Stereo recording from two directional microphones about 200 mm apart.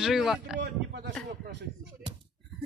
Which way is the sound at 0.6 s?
55° right (ahead or behind).